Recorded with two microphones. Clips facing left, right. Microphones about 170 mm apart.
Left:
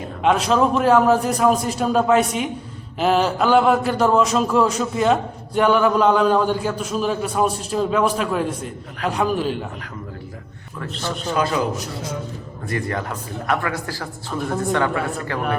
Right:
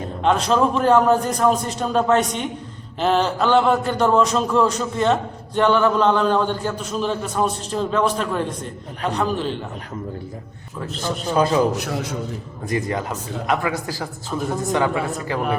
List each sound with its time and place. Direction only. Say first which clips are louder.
0.2 s a man's voice: left 1 dB; 5° left (ahead or behind)
11.3 s a man's voice: right 4 dB; 25° right (ahead or behind)
12.6 s speech: right 2 dB; 20° right (ahead or behind)